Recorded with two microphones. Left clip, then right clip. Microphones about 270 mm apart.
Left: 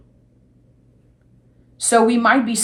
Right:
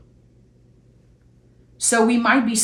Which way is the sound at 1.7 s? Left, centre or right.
Centre.